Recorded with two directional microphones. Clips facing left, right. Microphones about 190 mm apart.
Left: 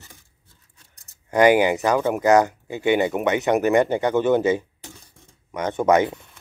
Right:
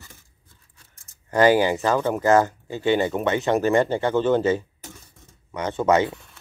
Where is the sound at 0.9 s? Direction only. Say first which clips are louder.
Left 1 dB; 15° left (ahead or behind).